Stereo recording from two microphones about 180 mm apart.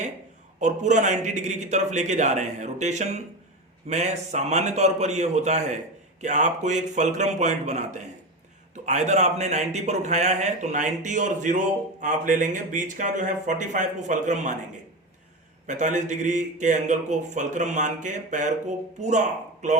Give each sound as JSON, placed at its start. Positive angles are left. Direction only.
{"t": 0.6, "sound": "a man's voice", "side_deg": -40}
{"t": 15.6, "sound": "a man's voice", "side_deg": -45}